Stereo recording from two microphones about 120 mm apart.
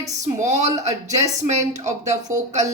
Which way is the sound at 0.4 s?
75° right (ahead or behind).